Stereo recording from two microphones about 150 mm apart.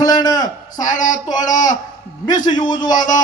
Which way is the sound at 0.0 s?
25° left (ahead or behind).